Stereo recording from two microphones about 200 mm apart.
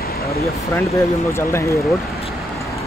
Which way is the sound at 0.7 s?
15° left (ahead or behind).